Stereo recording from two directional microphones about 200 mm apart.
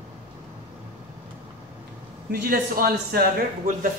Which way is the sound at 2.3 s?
45° right (ahead or behind).